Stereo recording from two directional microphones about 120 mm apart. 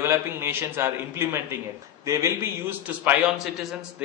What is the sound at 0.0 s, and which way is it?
A man's voice, 20° right (ahead or behind).